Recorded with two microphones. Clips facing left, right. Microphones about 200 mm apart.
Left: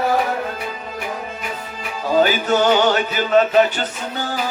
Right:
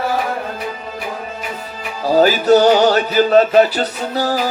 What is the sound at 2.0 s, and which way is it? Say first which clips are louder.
Music: right 5 dB; 35° right (ahead or behind).